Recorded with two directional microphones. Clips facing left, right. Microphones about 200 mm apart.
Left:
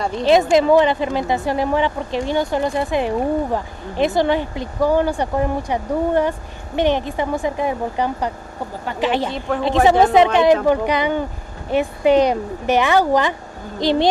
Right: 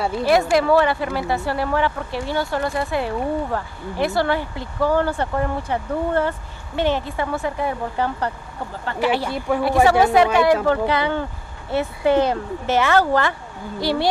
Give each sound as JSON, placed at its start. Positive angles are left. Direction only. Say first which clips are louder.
{"t": 0.2, "sound": "speech", "louder": "left 4 dB", "side_deg": 20}